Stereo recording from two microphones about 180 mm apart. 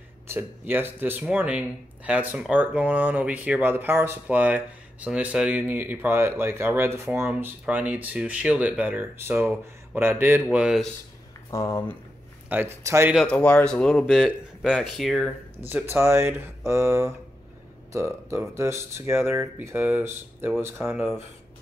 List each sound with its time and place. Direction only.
0.3 s speech: 10° right (ahead or behind)
11.5 s speech: 15° left (ahead or behind)
12.4 s speech: 10° right (ahead or behind)
13.1 s speech: 5° left (ahead or behind)
15.7 s speech: 15° right (ahead or behind)